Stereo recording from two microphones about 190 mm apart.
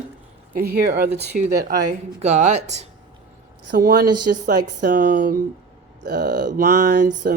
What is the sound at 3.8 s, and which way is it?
Speech, 50° right (ahead or behind).